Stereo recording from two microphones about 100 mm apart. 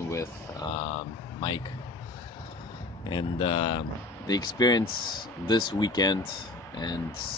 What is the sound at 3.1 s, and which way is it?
Speech, 50° left (ahead or behind).